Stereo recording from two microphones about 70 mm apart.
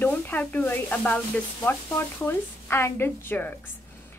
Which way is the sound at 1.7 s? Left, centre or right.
Left.